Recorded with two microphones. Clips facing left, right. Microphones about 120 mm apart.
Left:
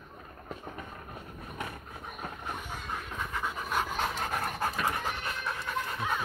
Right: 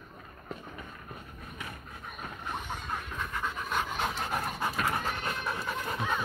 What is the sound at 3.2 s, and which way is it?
Pant, 5° left (ahead or behind).